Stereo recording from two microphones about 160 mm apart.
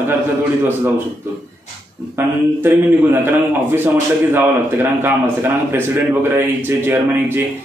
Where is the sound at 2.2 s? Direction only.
15° right (ahead or behind).